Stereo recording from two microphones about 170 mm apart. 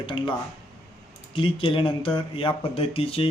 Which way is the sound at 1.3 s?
30° left (ahead or behind).